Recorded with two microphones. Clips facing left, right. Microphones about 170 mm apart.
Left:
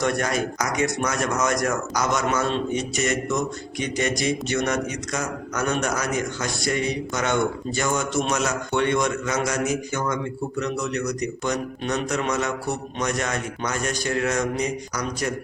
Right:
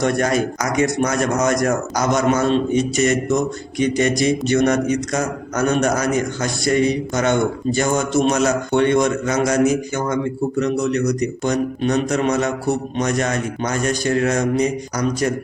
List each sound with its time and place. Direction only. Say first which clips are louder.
0.0 s a man's voice: right 5 dB; 35° right (ahead or behind)